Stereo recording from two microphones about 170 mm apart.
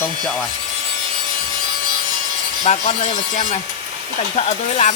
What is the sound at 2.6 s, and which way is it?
Speech, 40° left (ahead or behind).